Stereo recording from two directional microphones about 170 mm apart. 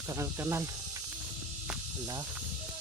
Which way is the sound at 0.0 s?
15° right (ahead or behind).